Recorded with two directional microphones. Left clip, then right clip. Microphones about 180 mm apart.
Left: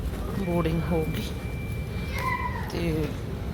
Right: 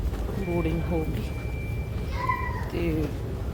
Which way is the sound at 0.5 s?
5° right (ahead or behind).